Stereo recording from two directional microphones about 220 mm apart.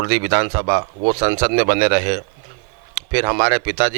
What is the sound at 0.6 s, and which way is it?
Speech, 25° right (ahead or behind).